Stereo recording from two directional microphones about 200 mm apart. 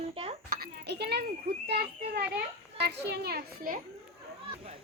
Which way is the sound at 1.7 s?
50° right (ahead or behind).